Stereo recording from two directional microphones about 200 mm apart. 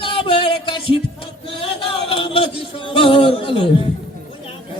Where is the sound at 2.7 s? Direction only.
25° left (ahead or behind).